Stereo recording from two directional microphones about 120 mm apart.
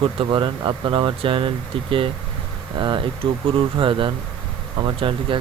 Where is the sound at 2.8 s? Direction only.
45° right (ahead or behind).